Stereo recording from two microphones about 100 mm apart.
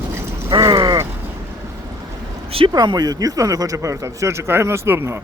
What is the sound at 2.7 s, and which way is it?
Speech, 45° right (ahead or behind).